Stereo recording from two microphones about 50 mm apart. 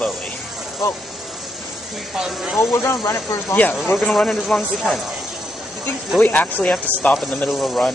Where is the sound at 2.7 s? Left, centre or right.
Left.